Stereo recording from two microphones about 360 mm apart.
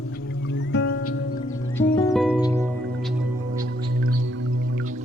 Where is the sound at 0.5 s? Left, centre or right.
Left.